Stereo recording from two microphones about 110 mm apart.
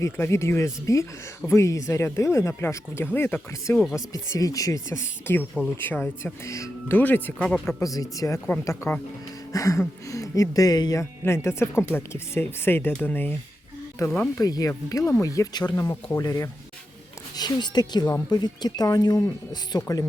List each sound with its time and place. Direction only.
0.0 s speech: 25° left (ahead or behind)
3.9 s speech: 30° left (ahead or behind)
6.9 s speech: 15° left (ahead or behind)
7.8 s speech: 30° left (ahead or behind)
11.2 s speech: 25° left (ahead or behind)
14.3 s speech: 35° left (ahead or behind)